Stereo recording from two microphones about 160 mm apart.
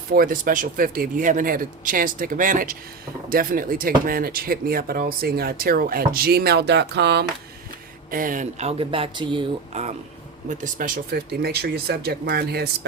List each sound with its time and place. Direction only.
0.1 s speech: 65° right (ahead or behind); by 7.3 s 90° right
8.1 s speech: 55° right (ahead or behind); by 9.8 s 30° right (ahead or behind)
10.5 s speech: 55° right (ahead or behind); by 12.6 s 75° right (ahead or behind)